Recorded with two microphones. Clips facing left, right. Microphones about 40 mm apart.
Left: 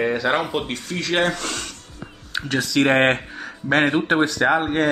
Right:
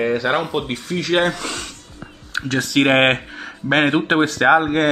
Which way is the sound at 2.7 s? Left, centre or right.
Right.